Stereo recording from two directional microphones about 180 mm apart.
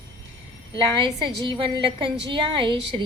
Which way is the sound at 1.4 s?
25° right (ahead or behind).